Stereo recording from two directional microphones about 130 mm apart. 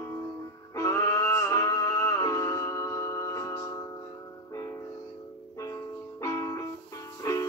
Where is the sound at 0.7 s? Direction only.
20° left (ahead or behind).